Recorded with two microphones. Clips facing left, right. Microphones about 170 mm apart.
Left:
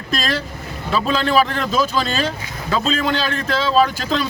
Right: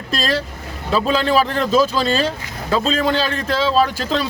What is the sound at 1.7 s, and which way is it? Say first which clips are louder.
Speech: right 5 dB; 35° right (ahead or behind).